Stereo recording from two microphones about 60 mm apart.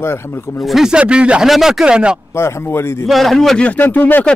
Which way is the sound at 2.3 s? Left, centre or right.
Left.